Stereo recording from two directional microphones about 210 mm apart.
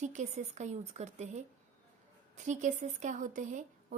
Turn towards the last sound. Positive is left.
turn(degrees=-35)  # may be behind; listen again after turning